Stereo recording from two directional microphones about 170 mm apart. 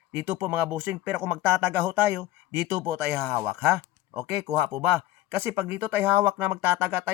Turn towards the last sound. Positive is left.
turn(degrees=-15)  # may be behind; listen again after turning